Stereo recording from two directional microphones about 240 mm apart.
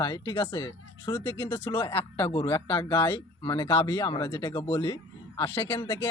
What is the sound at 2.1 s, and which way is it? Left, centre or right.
Speech, left.